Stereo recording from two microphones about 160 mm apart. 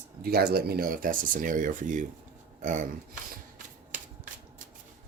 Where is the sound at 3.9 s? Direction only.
55° right (ahead or behind).